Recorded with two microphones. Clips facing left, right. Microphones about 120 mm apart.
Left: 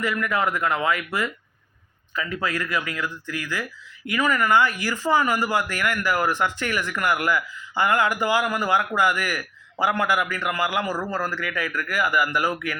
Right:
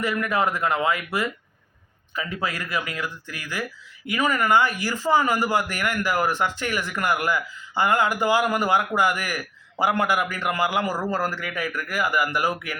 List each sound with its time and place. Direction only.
0.0 s speech: 25° right (ahead or behind)
4.1 s a man's voice: 25° right (ahead or behind)